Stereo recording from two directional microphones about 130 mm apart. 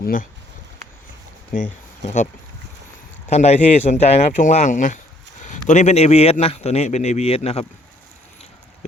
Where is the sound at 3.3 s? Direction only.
60° left (ahead or behind).